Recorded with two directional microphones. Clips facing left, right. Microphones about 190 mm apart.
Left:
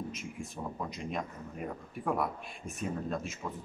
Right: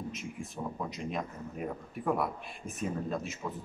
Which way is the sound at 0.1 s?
Centre (ahead or behind).